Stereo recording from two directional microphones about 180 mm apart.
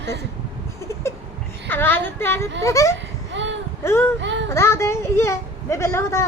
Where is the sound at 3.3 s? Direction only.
90° right.